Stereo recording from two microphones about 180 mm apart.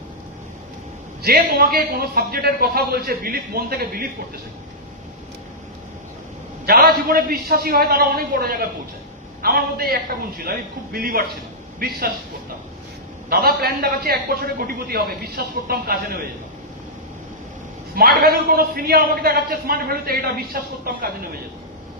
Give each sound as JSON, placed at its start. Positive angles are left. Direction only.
{"t": 1.2, "sound": "a man's voice", "side_deg": -55}
{"t": 6.7, "sound": "a man's voice", "side_deg": -60}
{"t": 13.3, "sound": "a man's voice", "side_deg": -55}
{"t": 17.9, "sound": "a man's voice", "side_deg": -55}